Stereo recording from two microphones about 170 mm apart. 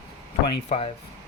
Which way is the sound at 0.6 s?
35° left (ahead or behind).